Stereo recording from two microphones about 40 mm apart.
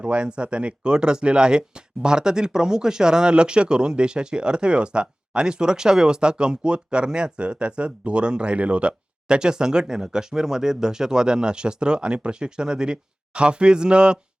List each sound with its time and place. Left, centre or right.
0.0 s speech: right